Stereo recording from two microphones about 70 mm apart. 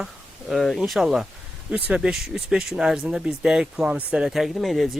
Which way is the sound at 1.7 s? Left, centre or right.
Centre.